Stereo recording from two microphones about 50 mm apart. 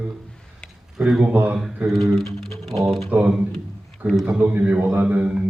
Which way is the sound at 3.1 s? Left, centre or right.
Right.